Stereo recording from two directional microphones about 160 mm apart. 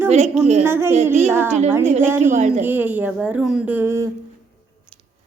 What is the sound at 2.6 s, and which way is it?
Speech, 10° right (ahead or behind).